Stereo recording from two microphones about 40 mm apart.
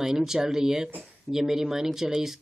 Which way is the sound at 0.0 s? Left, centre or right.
Centre.